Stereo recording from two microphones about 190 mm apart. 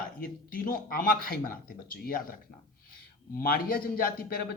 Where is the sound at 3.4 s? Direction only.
50° left (ahead or behind).